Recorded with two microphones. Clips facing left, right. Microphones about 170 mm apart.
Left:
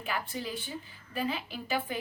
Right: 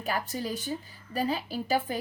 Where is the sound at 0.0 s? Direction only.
40° right (ahead or behind).